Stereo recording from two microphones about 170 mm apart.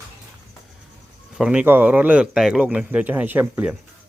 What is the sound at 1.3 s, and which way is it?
Speech, 5° right (ahead or behind).